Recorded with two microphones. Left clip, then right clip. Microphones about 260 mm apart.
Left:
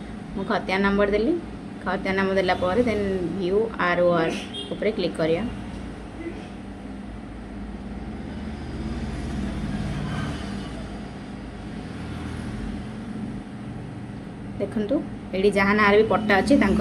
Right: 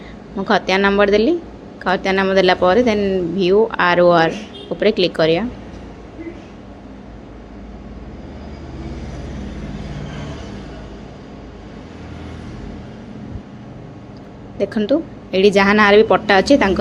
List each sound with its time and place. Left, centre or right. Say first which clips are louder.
0.4 s speech: right 9 dB; right
14.6 s speech: right 8 dB; right